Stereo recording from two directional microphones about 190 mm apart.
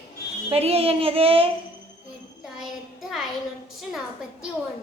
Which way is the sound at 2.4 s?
Centre (ahead or behind).